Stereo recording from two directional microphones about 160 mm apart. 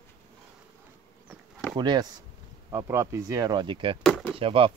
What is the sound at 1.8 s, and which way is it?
Speech, 25° right (ahead or behind).